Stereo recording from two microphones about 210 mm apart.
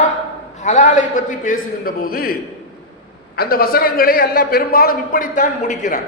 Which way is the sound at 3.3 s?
45° left (ahead or behind).